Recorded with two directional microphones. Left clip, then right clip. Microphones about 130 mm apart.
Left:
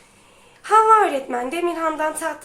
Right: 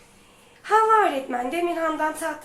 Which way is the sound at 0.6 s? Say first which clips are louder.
Left 4 dB; 40° left (ahead or behind).